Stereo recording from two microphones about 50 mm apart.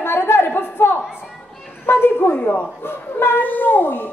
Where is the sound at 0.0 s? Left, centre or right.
Left.